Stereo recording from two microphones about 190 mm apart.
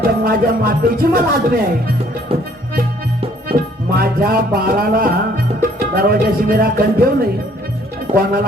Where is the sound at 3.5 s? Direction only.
50° right (ahead or behind).